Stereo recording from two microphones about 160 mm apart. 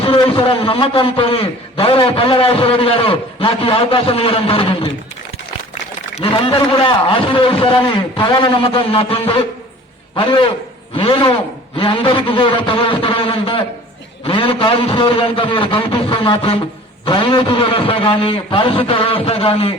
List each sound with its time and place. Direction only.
0.0 s a man's voice: 35° left (ahead or behind)
6.1 s a man's voice: 35° left (ahead or behind)